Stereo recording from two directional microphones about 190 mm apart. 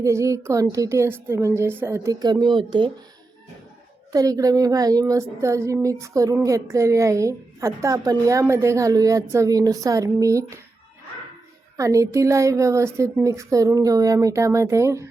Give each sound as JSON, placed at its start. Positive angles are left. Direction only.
{"t": 0.0, "sound": "a woman's voice", "side_deg": -15}
{"t": 4.1, "sound": "a woman's voice", "side_deg": -20}
{"t": 11.8, "sound": "a woman's voice", "side_deg": -15}